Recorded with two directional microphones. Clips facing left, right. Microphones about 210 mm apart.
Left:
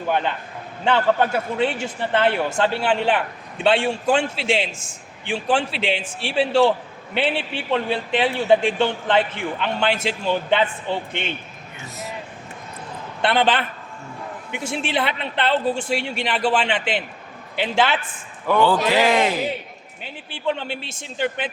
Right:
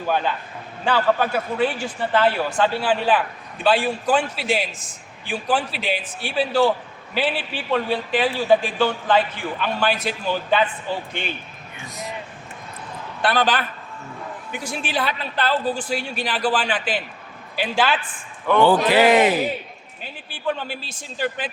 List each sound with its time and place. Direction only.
0.9 s a man's voice: 25° left (ahead or behind)
13.2 s a man's voice: 25° left (ahead or behind)
19.1 s a man's voice: 5° right (ahead or behind)
20.3 s a man's voice: 25° left (ahead or behind)